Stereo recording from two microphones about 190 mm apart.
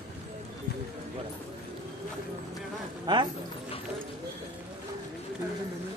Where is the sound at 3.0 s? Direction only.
20° right (ahead or behind).